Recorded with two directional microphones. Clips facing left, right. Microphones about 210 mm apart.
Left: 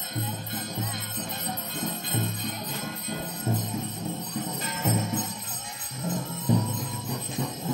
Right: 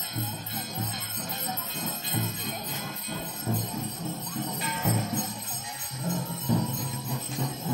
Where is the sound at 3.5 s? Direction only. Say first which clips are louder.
Left 1 dB; 25° left (ahead or behind).